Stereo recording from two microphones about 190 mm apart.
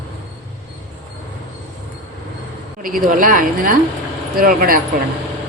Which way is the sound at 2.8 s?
45° right (ahead or behind).